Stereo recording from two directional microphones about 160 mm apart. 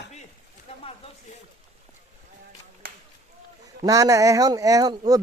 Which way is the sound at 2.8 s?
80° right.